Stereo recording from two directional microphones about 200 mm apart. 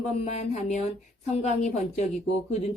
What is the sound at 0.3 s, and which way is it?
A woman's voice, 35° left (ahead or behind).